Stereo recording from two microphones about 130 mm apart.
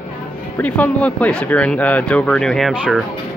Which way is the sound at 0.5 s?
10° left (ahead or behind).